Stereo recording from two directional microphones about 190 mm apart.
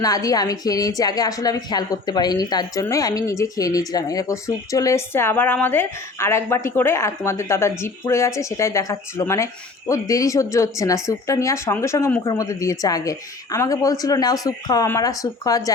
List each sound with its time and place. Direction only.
0.0 s speech: 20° left (ahead or behind)